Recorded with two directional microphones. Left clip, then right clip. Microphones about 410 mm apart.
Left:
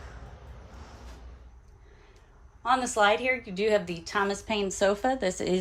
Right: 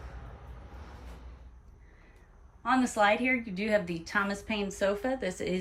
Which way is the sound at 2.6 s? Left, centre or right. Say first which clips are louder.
Left 2 dB; centre.